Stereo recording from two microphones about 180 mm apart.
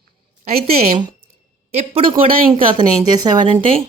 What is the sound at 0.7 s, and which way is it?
A woman's voice, 35° right (ahead or behind).